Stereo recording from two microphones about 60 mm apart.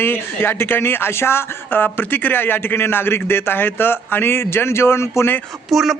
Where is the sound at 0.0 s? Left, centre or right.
Left.